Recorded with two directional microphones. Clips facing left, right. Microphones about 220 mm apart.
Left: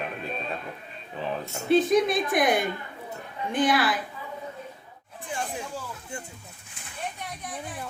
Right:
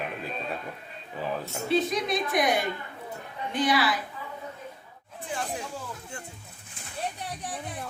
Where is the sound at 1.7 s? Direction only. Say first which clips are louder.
Left 5 dB; 50° left (ahead or behind).